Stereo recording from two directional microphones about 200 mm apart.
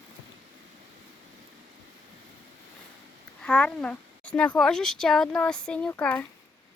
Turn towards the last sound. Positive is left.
turn(degrees=10)  # may be behind; listen again after turning